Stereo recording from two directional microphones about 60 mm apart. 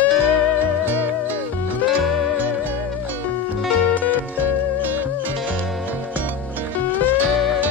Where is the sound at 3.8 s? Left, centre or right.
Left.